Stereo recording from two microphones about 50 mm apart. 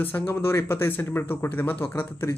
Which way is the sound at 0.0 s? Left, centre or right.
Left.